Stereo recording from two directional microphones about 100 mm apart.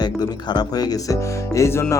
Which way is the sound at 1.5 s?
25° left (ahead or behind).